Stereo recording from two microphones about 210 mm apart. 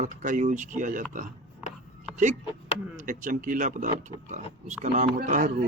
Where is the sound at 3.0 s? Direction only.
40° right (ahead or behind).